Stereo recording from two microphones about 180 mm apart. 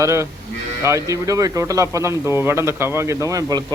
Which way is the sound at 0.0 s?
15° right (ahead or behind).